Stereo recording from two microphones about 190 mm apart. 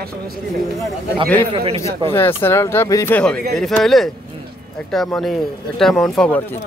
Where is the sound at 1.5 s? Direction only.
25° right (ahead or behind).